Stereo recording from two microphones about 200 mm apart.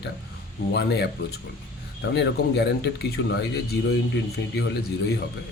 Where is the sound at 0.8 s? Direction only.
55° left (ahead or behind).